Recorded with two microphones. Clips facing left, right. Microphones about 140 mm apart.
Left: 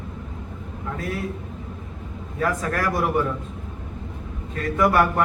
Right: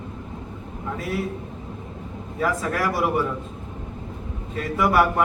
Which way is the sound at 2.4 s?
5° right (ahead or behind).